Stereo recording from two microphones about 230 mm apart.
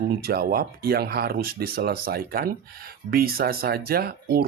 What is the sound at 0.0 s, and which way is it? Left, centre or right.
Speech, right.